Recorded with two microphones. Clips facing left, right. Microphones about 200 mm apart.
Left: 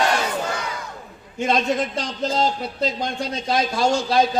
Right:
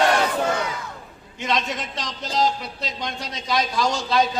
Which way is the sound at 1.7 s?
50° left (ahead or behind).